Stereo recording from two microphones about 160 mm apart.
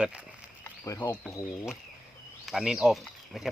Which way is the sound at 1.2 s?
5° right (ahead or behind).